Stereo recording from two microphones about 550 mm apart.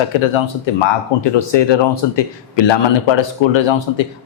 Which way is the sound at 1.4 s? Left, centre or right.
Left.